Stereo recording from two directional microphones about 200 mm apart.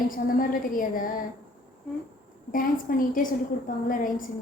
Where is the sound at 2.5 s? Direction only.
45° left (ahead or behind).